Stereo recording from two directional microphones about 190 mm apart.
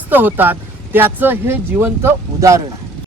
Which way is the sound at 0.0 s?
10° right (ahead or behind).